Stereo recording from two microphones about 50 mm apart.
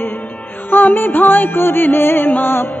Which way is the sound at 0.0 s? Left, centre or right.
Left.